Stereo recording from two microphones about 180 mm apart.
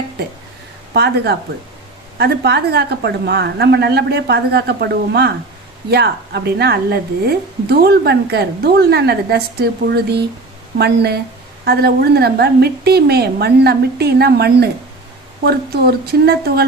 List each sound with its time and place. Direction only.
0.2 s a woman's voice: 65° right (ahead or behind)